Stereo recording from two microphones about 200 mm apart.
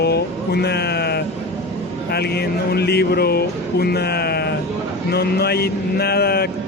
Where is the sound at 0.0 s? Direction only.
55° left (ahead or behind).